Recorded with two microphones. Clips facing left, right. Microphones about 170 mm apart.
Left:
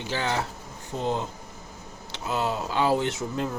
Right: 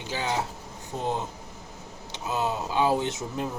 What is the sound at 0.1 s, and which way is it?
Speech, 10° right (ahead or behind).